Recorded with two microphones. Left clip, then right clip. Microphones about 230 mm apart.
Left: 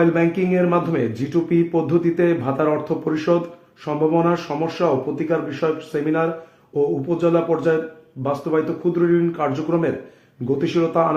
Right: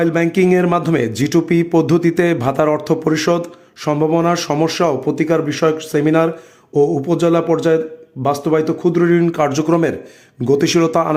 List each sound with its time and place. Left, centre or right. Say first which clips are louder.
0.0 s speech: right 3 dB; right